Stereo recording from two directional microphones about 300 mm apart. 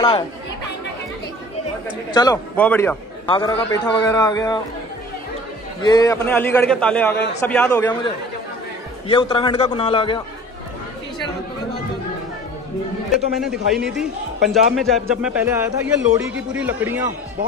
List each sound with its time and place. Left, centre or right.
2.1 s a man's voice: centre
3.3 s a man's voice: centre
5.8 s a man's voice: centre
13.3 s a man's voice: centre